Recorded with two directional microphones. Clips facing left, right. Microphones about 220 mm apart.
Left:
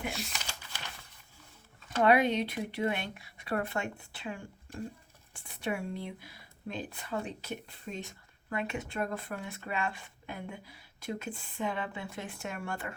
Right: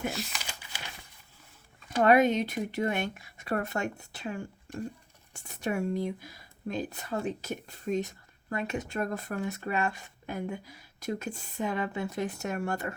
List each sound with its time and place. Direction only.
0.1 s speech: centre (ahead or behind)
0.4 s typing: 10° right (ahead or behind)
2.0 s speech: 45° right (ahead or behind)